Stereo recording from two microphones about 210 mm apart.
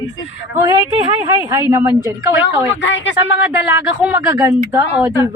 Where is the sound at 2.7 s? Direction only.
60° left (ahead or behind).